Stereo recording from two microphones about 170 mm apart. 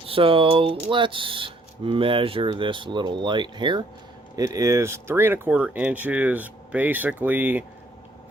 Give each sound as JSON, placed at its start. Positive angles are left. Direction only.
{"t": 0.1, "sound": "speech", "side_deg": -30}